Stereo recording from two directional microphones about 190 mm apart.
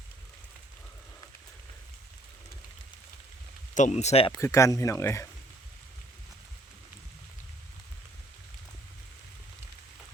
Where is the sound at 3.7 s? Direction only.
40° left (ahead or behind).